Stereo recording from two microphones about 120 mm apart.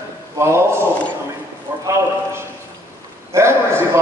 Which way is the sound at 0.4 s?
20° right (ahead or behind).